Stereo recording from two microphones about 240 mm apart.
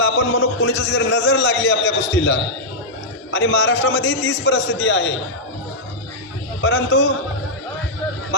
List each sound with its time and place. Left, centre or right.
0.0 s a man's voice: left
6.6 s a man's voice: left